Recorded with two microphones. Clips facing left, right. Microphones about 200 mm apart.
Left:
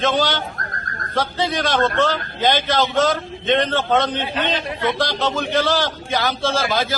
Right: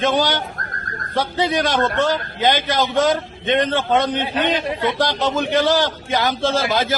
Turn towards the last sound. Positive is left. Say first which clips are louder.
# right 2 dB
turn(degrees=-20)  # may be behind; listen again after turning